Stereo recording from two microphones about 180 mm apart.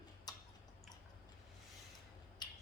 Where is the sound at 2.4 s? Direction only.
25° left (ahead or behind).